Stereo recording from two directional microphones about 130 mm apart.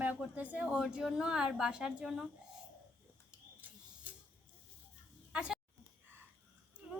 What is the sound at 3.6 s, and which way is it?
Tick-tock, 15° right (ahead or behind).